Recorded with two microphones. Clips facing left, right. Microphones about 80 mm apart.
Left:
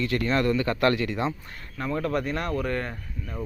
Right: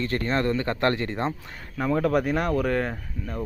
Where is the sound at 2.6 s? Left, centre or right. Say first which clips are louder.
Right 4 dB; right.